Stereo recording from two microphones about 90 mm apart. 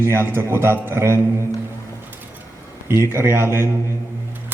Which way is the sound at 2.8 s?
30° right (ahead or behind).